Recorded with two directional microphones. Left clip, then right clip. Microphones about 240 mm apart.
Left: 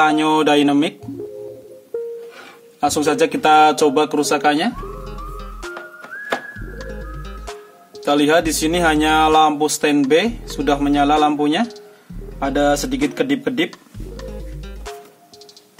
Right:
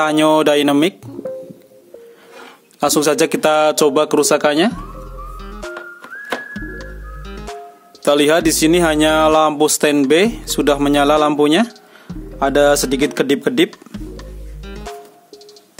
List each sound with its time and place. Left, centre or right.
0.0 s speech: right
2.8 s speech: right
5.4 s music: centre
6.8 s music: centre
8.0 s speech: right
14.7 s music: centre